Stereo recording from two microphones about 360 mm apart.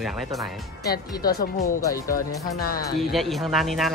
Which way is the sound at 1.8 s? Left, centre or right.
Centre.